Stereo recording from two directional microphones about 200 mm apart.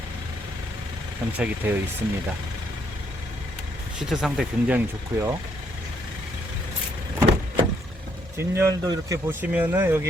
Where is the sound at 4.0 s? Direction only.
Centre (ahead or behind).